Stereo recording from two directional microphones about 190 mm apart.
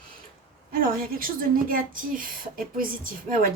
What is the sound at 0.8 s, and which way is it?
A woman's voice, 50° right (ahead or behind).